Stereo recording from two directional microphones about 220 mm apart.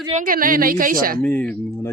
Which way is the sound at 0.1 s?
35° right (ahead or behind).